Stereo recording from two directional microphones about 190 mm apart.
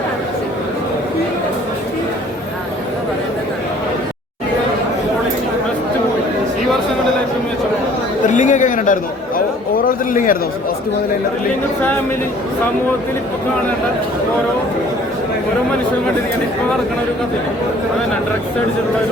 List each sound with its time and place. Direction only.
8.3 s chatter: 40° left (ahead or behind)